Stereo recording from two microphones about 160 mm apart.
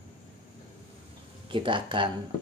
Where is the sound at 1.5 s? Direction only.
30° right (ahead or behind).